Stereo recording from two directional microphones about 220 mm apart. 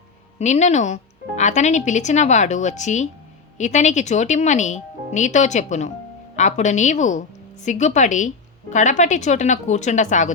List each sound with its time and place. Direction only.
0.3 s speech: 30° left (ahead or behind)